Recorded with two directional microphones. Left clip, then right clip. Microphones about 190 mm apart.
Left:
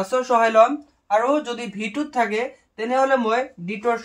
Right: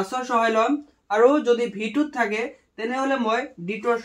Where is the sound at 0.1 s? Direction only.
Centre (ahead or behind).